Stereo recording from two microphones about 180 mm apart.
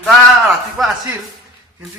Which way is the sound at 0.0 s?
Centre (ahead or behind).